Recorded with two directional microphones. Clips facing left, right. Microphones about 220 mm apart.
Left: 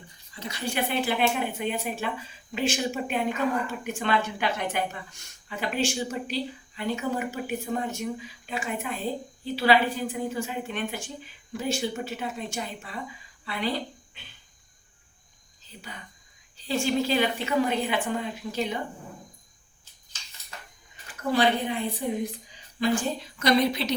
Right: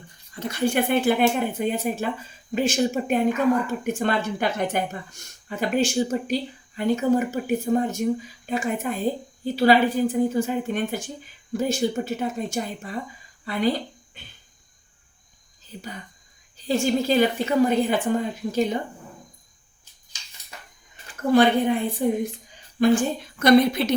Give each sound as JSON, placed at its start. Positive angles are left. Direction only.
{"t": 0.3, "sound": "speech", "side_deg": -50}
{"t": 16.6, "sound": "speech", "side_deg": -45}
{"t": 21.2, "sound": "speech", "side_deg": -50}